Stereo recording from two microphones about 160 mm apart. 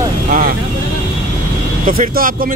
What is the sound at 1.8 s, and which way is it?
Speech, 60° right (ahead or behind).